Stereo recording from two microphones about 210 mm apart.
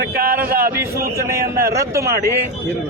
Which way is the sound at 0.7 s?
10° right (ahead or behind).